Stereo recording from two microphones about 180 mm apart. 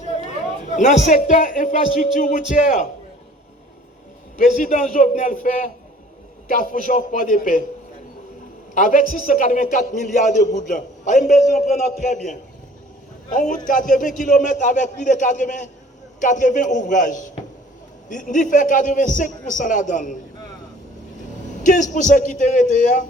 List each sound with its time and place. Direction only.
0.8 s a man's voice: 40° left (ahead or behind)
4.4 s a man's voice: 45° left (ahead or behind)
8.7 s a man's voice: 45° left (ahead or behind)
13.3 s a man's voice: 45° left (ahead or behind)
21.6 s a man's voice: 45° left (ahead or behind)